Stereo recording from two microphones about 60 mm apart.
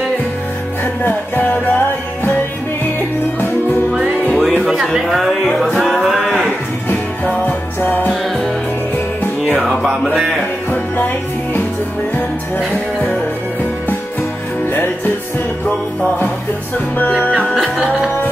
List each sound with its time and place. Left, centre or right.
1.0 s music: left
4.3 s music: centre
4.8 s speech: centre
5.3 s music: centre
7.4 s music: left